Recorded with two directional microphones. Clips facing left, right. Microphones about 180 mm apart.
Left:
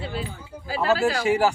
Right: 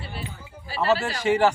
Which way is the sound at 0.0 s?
90° left.